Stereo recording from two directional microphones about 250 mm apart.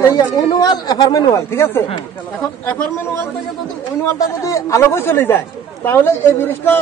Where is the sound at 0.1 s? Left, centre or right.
Centre.